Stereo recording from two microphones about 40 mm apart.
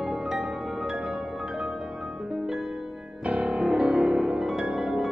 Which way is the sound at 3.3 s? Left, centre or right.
Right.